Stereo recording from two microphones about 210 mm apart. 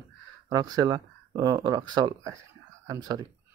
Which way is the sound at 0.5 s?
15° right (ahead or behind).